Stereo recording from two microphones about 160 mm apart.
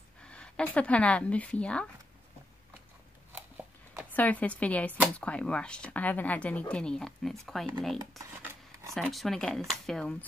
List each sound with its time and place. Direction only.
0.2 s a woman's voice: 5° left (ahead or behind)
3.3 s a sound: 10° right (ahead or behind)
4.1 s a woman's voice: 10° left (ahead or behind)
8.2 s dishes: 15° right (ahead or behind)
8.9 s speech: centre (ahead or behind)